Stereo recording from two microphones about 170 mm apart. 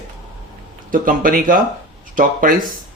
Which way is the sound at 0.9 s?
55° right (ahead or behind).